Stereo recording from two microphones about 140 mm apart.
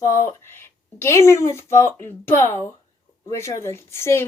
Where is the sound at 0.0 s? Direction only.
20° left (ahead or behind).